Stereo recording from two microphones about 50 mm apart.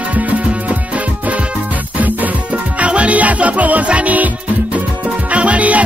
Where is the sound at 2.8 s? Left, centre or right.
Right.